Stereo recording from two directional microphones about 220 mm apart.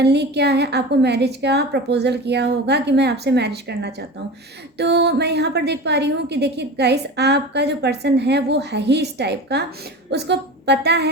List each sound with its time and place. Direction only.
0.0 s a woman's voice: 50° right (ahead or behind)